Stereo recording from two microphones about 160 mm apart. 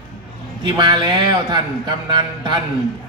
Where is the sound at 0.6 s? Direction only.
30° right (ahead or behind).